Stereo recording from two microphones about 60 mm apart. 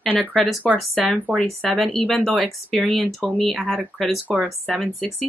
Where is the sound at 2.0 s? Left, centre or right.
Centre.